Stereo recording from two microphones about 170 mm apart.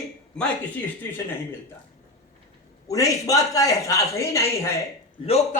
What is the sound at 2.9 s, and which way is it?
A man's voice, 20° left (ahead or behind).